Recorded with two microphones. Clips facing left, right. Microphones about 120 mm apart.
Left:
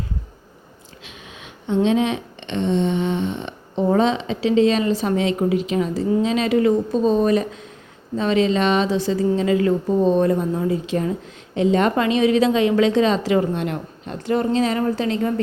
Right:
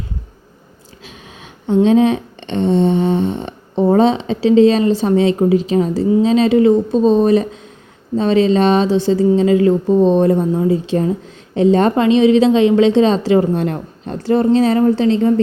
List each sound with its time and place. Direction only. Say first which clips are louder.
1.0 s a woman's voice: right 3 dB; 35° right (ahead or behind)